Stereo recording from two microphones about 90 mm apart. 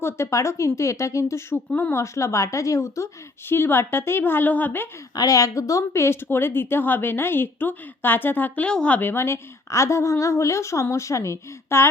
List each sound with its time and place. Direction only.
0.0 s speech: 35° left (ahead or behind)
5.1 s speech: 40° left (ahead or behind)